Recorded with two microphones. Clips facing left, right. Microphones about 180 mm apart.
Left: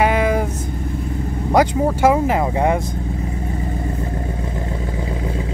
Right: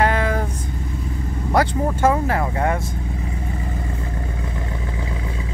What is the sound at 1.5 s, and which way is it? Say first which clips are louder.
Speech: left 4 dB; 10° left (ahead or behind).